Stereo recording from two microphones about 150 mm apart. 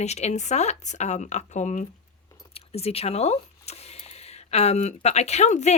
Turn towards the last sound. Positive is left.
turn(degrees=50)  # may be behind; listen again after turning